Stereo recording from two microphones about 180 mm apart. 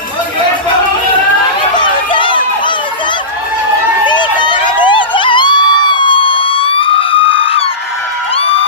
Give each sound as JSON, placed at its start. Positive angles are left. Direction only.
{"t": 1.8, "sound": "crowd", "side_deg": 25}
{"t": 4.0, "sound": "crowd", "side_deg": 25}
{"t": 8.4, "sound": "cheering", "side_deg": 30}